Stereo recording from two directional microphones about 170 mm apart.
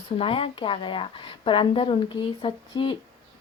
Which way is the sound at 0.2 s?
35° left (ahead or behind).